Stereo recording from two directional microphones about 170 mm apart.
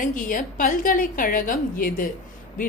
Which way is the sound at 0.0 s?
50° left (ahead or behind).